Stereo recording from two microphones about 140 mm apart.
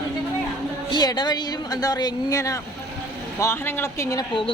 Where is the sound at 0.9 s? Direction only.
30° left (ahead or behind).